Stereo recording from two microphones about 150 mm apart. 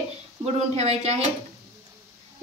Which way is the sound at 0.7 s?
45° right (ahead or behind).